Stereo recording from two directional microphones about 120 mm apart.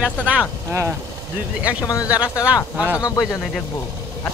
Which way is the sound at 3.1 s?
Centre (ahead or behind).